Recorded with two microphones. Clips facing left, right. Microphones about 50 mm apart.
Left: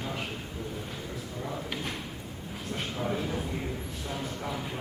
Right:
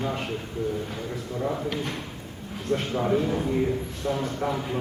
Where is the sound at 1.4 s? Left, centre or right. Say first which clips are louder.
Right 8 dB; right.